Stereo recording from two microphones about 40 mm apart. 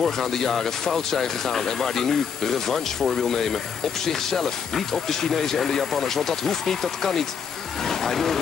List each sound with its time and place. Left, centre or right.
0.0 s speech: centre